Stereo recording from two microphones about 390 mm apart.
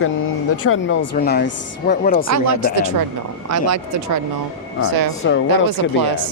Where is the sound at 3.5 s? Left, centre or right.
Right.